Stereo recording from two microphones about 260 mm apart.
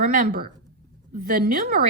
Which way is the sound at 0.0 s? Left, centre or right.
Right.